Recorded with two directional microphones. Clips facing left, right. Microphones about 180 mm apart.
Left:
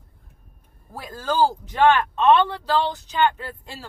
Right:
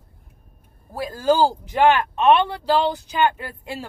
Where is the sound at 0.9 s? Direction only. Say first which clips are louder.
Right 7 dB; 10° right (ahead or behind).